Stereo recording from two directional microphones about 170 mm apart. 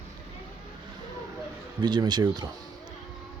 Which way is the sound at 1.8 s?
25° right (ahead or behind).